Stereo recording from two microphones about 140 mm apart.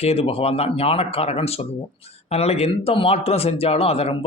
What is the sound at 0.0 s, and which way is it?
A man's voice, 45° left (ahead or behind).